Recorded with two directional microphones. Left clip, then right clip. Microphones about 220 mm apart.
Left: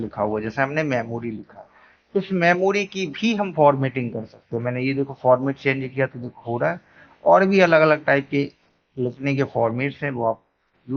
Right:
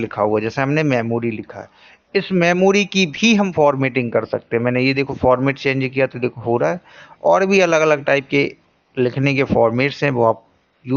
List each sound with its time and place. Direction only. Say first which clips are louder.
0.0 s speech: right 6 dB; 30° right (ahead or behind)